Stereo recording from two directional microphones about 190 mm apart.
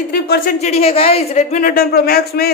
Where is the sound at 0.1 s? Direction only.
50° left (ahead or behind).